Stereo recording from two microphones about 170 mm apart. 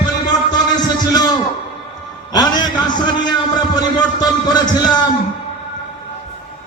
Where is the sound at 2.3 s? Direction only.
25° left (ahead or behind).